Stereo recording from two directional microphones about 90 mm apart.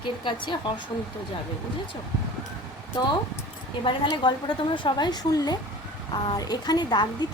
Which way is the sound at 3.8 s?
60° left (ahead or behind).